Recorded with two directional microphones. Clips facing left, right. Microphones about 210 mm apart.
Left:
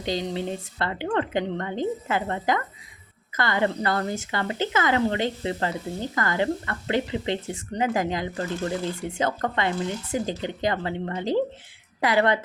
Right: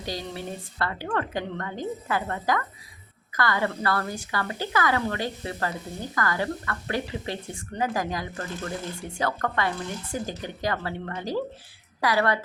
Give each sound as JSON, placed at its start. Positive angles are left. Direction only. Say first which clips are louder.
{"t": 0.0, "sound": "a woman's voice", "louder": "left 6 dB", "side_deg": 20}